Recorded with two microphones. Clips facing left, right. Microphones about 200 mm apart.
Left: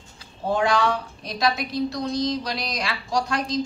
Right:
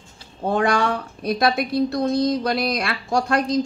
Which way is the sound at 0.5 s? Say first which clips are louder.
Right 2 dB; 55° right (ahead or behind).